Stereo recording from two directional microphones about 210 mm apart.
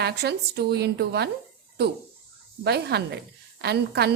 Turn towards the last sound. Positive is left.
turn(degrees=-50)  # may be behind; listen again after turning